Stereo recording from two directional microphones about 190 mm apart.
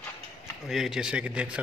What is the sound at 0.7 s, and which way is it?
Speech, centre (ahead or behind).